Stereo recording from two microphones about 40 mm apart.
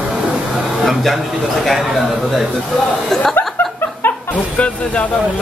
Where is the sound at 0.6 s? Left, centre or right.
Centre.